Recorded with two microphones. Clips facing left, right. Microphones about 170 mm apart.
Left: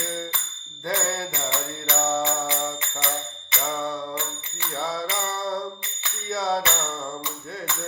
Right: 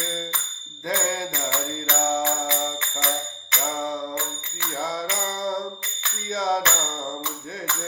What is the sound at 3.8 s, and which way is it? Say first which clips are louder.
Music: right 1 dB; 20° right (ahead or behind).